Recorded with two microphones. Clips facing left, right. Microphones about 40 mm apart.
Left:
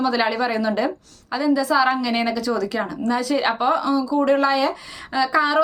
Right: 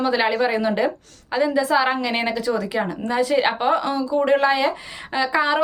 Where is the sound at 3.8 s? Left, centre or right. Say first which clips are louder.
Left 1 dB; right.